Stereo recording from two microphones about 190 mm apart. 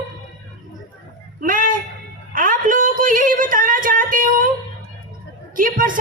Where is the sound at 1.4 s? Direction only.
45° right (ahead or behind).